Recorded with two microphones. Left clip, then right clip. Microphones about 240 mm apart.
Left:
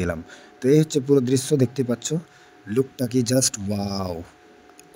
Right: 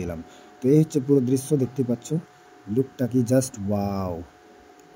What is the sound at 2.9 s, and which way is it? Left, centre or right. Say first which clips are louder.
Speech: left 1 dB; left.